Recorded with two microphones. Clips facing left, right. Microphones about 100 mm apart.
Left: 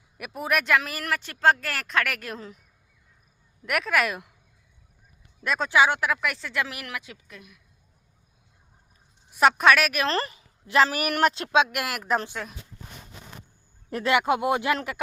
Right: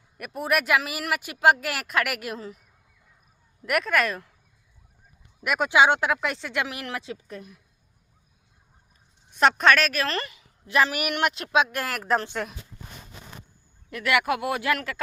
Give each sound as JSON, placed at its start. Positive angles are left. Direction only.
{"t": 0.2, "sound": "speech", "side_deg": 0}
{"t": 3.7, "sound": "speech", "side_deg": 0}
{"t": 5.4, "sound": "speech", "side_deg": -10}
{"t": 9.3, "sound": "a woman's voice", "side_deg": 5}
{"t": 10.1, "sound": "speech", "side_deg": 35}
{"t": 11.5, "sound": "a woman's voice", "side_deg": 20}
{"t": 13.9, "sound": "speech", "side_deg": 25}